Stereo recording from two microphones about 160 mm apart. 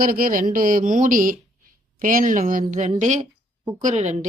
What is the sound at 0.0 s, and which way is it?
Speech, 60° right (ahead or behind).